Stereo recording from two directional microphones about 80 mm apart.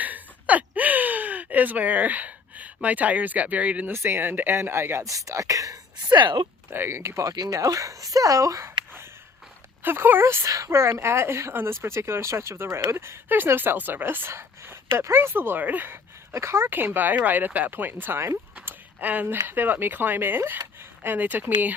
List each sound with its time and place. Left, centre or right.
0.0 s gasp: centre
3.9 s speech: right
5.0 s speech: right
6.1 s speech: right
6.7 s speech: right
9.8 s speech: right
16.3 s speech: right
18.6 s a sound: right
19.5 s speech: right